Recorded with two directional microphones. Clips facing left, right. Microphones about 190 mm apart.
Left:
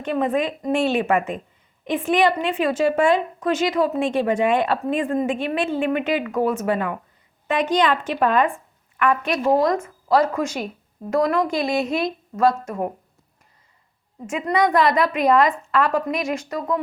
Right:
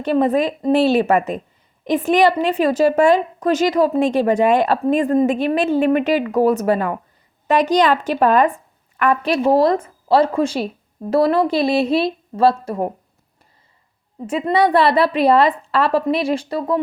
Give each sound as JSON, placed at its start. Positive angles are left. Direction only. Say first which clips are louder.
{"t": 0.0, "sound": "a woman's voice", "louder": "right 5 dB", "side_deg": -35}
{"t": 14.3, "sound": "a woman's voice", "louder": "right 4 dB", "side_deg": -30}